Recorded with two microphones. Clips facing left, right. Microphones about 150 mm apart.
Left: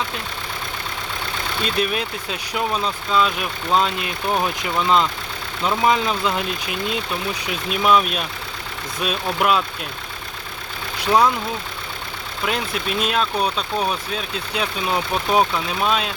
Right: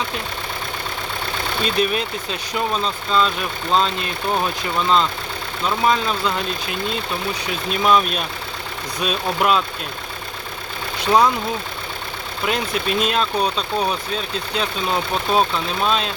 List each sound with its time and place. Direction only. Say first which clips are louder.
1.6 s speech: right 2 dB; centre (ahead or behind)
11.0 s speech: right 1 dB; 5° left (ahead or behind)
12.5 s speech: right 2 dB; centre (ahead or behind)